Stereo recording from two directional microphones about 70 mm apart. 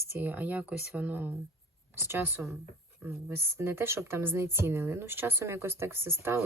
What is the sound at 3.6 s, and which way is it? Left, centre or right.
Speech, right.